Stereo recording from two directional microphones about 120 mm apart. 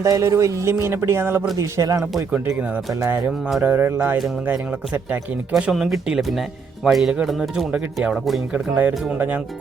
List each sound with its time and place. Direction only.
0.0 s speech: 25° right (ahead or behind)
2.0 s speech: 5° right (ahead or behind)
2.5 s speech: 20° right (ahead or behind); by 8.4 s centre (ahead or behind)
8.5 s speech: 10° right (ahead or behind)